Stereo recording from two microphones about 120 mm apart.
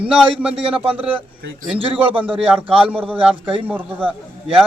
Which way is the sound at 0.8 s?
50° right (ahead or behind).